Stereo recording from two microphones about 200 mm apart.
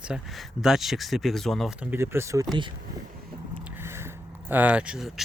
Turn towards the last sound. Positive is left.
turn(degrees=-5)  # may be behind; listen again after turning